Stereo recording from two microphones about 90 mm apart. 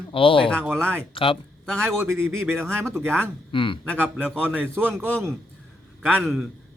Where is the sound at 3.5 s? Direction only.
70° left (ahead or behind).